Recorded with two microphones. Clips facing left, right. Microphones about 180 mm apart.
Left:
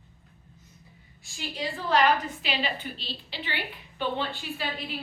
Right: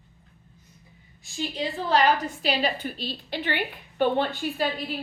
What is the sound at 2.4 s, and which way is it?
A woman's voice, 40° right (ahead or behind).